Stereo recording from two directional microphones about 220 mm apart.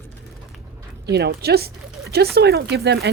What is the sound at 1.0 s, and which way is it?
Speech, 50° right (ahead or behind).